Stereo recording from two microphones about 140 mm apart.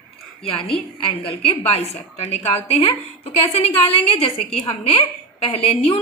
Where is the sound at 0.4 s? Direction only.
40° left (ahead or behind).